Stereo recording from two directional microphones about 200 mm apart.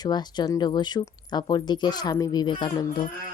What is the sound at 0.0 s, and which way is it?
Speech, 20° left (ahead or behind).